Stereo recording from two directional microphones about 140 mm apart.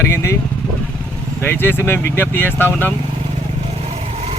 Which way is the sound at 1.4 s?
15° left (ahead or behind).